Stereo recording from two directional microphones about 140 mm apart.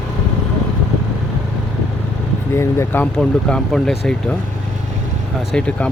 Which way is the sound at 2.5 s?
20° left (ahead or behind).